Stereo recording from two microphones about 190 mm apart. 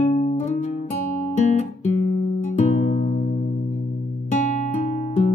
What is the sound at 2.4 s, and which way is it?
Music, 40° left (ahead or behind).